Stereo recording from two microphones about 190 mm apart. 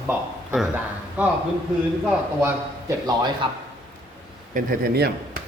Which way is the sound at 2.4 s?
15° right (ahead or behind).